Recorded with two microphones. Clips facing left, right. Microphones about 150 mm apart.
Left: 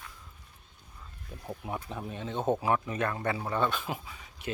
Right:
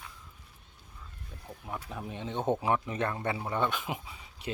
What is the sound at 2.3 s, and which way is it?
Speech, 10° left (ahead or behind).